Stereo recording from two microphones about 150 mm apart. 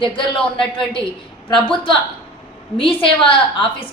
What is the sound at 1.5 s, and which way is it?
A woman's voice, 35° left (ahead or behind).